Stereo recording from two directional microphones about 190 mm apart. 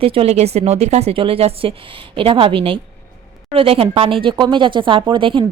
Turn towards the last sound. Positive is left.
turn(degrees=-25)  # may be behind; listen again after turning